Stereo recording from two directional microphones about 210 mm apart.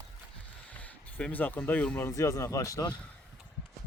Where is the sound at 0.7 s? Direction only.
5° left (ahead or behind).